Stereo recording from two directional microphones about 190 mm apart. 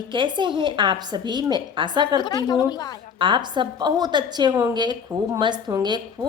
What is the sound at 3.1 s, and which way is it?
A woman's voice, 25° right (ahead or behind).